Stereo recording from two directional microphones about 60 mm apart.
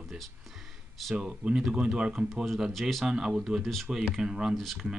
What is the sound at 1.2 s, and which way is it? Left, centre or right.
Speech, centre.